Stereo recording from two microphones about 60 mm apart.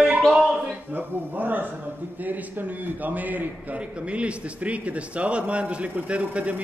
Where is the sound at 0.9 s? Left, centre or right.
Right.